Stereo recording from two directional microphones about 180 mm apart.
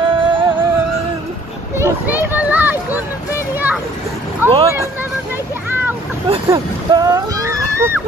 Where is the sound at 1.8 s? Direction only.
10° right (ahead or behind).